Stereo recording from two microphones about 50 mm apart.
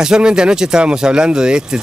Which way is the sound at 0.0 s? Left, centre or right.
Centre.